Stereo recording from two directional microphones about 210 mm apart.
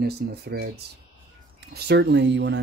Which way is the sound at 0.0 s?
50° right (ahead or behind).